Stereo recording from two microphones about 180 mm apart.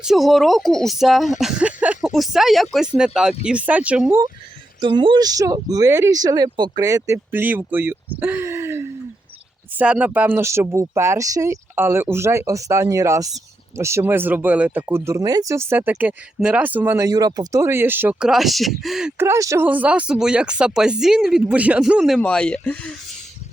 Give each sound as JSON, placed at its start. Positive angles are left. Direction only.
{"t": 0.0, "sound": "speech", "side_deg": 0}
{"t": 4.8, "sound": "speech", "side_deg": -25}
{"t": 19.1, "sound": "speech", "side_deg": -15}